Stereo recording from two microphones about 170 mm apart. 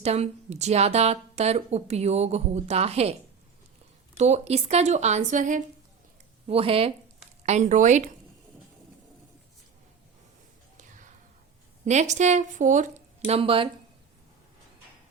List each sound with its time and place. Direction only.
0.0 s a woman's voice: 40° right (ahead or behind)
4.2 s a woman's voice: 40° right (ahead or behind)
6.5 s a woman's voice: 35° right (ahead or behind)
7.4 s a woman's voice: 45° right (ahead or behind)
10.8 s a sound: 45° right (ahead or behind)
11.9 s a woman's voice: 45° right (ahead or behind)